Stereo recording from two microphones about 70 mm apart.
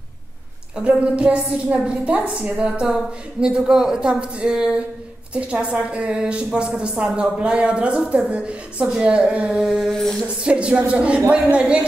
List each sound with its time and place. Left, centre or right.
0.7 s a woman's voice: centre
9.8 s a sound: centre
10.2 s a woman's voice: centre